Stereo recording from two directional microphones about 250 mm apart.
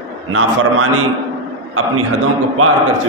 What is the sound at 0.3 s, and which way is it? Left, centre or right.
Speech, right.